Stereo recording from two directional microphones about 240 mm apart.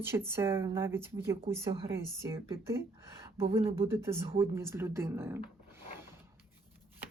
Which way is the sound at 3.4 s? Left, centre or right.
Right.